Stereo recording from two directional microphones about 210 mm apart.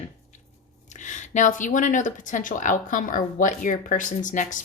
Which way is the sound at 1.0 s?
35° left (ahead or behind).